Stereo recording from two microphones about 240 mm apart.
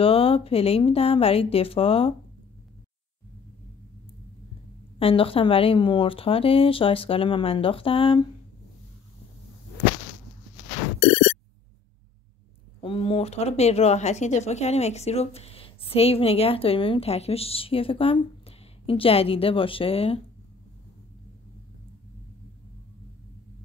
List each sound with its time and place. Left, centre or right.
0.0 s speech: left
4.9 s speech: left
12.8 s speech: left